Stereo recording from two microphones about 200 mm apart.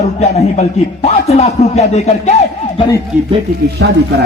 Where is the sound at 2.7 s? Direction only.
20° left (ahead or behind).